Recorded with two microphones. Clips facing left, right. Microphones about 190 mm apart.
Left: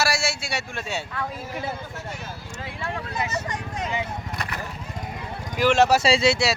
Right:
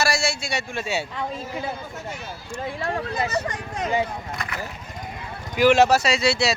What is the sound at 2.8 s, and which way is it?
Speech, 35° right (ahead or behind).